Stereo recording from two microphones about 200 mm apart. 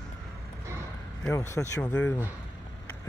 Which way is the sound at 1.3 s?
15° left (ahead or behind).